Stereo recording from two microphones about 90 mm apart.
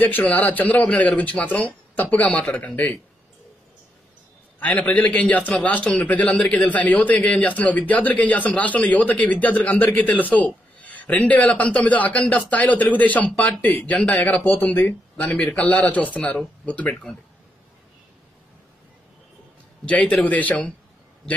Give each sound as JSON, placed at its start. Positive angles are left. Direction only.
{"t": 0.0, "sound": "a man's voice", "side_deg": 20}
{"t": 4.6, "sound": "a man's voice", "side_deg": 20}
{"t": 19.8, "sound": "a man's voice", "side_deg": 15}